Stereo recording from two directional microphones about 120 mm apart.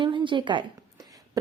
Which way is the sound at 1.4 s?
30° right (ahead or behind).